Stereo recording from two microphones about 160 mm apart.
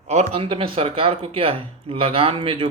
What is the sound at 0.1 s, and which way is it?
Speech, 45° right (ahead or behind).